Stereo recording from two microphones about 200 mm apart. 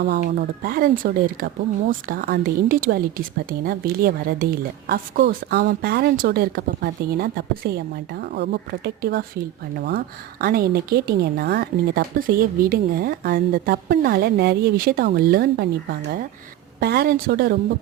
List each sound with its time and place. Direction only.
0.3 s a woman's voice: 45° right (ahead or behind)